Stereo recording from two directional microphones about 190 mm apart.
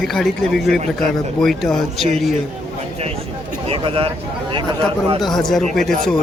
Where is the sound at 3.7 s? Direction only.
30° right (ahead or behind).